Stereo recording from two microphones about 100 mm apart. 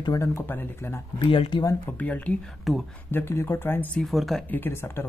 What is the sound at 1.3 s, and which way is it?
Speech, 60° left (ahead or behind).